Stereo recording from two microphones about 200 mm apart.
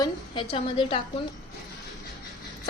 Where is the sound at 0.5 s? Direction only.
25° left (ahead or behind).